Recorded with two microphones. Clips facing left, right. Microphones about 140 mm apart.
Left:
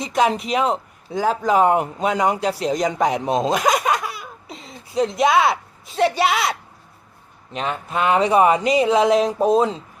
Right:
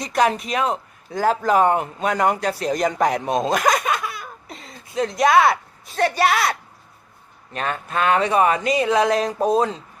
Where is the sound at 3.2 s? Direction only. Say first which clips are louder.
Left 1 dB; 25° left (ahead or behind).